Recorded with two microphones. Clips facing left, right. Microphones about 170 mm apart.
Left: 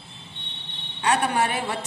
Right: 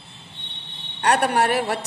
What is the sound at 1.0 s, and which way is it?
Speech, 70° right (ahead or behind).